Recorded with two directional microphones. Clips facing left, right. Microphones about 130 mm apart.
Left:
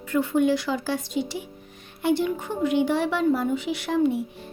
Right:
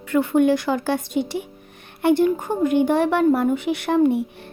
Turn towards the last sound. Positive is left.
turn(degrees=-60)  # may be behind; listen again after turning